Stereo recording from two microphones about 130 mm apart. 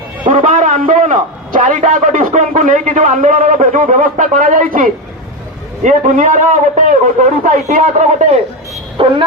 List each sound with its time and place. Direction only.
0.3 s a man's voice: 85° right
5.8 s a man's voice: 75° right (ahead or behind)
9.0 s dog: 40° right (ahead or behind)